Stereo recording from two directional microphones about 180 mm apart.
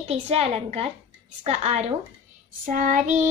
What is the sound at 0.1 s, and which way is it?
Child singing, 35° right (ahead or behind).